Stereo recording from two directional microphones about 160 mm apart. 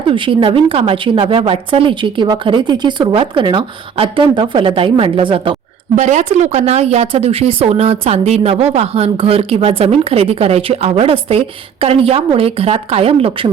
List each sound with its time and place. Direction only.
0.1 s speech: 30° right (ahead or behind)
6.0 s speech: 45° right (ahead or behind)